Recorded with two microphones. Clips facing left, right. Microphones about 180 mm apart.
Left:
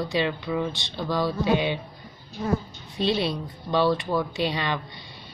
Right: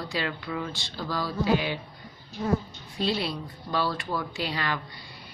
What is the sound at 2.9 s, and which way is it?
Speech, 25° left (ahead or behind).